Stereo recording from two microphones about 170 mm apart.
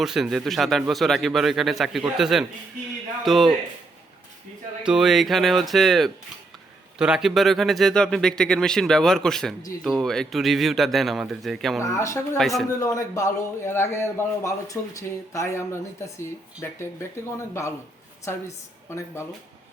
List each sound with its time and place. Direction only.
0.0 s speech: centre (ahead or behind)
4.8 s speech: 5° right (ahead or behind)
11.8 s a man's voice: 15° left (ahead or behind)
12.4 s speech: centre (ahead or behind)
12.8 s a man's voice: 20° left (ahead or behind)